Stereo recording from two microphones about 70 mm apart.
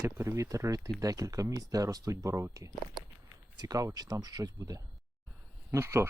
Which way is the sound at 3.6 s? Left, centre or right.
Right.